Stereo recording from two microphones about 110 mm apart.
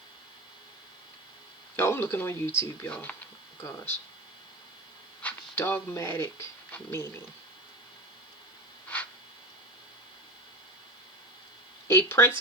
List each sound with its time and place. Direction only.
1.7 s speech: 20° left (ahead or behind)
3.6 s speech: 25° left (ahead or behind)
5.2 s speech: 20° left (ahead or behind)
11.9 s speech: 25° left (ahead or behind)